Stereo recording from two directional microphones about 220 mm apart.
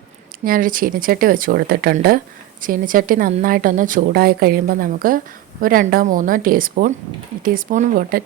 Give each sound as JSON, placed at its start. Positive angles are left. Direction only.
{"t": 0.4, "sound": "speech", "side_deg": -40}